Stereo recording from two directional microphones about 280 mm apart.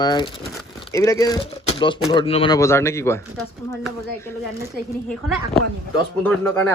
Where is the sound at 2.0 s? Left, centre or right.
Centre.